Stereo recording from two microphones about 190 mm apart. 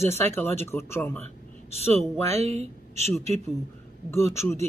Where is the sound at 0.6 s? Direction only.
15° left (ahead or behind).